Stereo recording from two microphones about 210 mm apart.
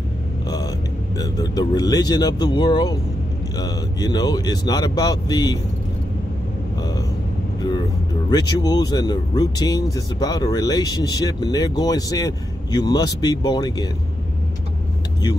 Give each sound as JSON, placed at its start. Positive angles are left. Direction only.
{"t": 1.1, "sound": "speech", "side_deg": 20}
{"t": 8.3, "sound": "speech", "side_deg": 20}